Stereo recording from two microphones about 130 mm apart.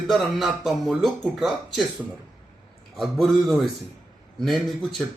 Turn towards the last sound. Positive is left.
turn(degrees=0)  # may be behind; listen again after turning